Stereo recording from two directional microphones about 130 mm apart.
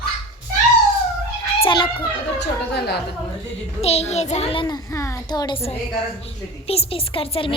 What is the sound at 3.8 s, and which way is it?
A woman's voice, 55° left (ahead or behind).